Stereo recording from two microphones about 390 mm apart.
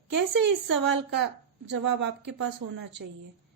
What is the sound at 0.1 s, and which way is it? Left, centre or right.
Speech, right.